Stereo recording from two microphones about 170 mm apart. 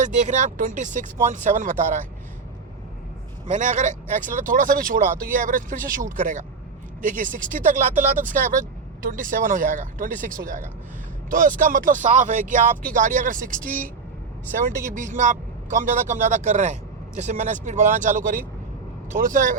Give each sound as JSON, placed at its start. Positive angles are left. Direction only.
{"t": 0.0, "sound": "speech", "side_deg": -45}
{"t": 3.4, "sound": "speech", "side_deg": -45}